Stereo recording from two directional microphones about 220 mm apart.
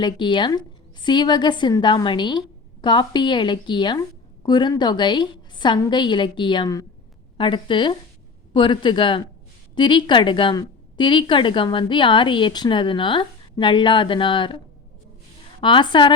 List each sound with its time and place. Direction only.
0.0 s a woman's voice: 20° left (ahead or behind)
15.6 s a woman's voice: 20° left (ahead or behind)